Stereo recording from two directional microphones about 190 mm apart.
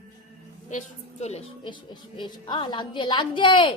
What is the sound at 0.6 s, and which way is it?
A woman's voice, 35° left (ahead or behind).